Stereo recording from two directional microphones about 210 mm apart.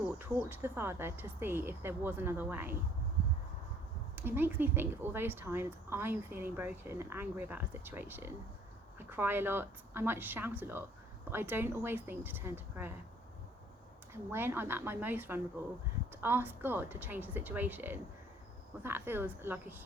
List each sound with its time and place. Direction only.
0.2 s speech: 10° right (ahead or behind)
4.1 s speech: 10° right (ahead or behind)
14.1 s speech: 10° right (ahead or behind)